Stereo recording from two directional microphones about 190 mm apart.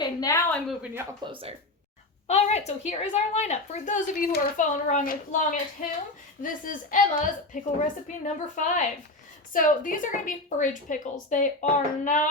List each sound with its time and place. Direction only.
0.0 s a sound: 20° left (ahead or behind)
1.2 s speech: 30° right (ahead or behind)
2.2 s a woman's voice: 35° left (ahead or behind)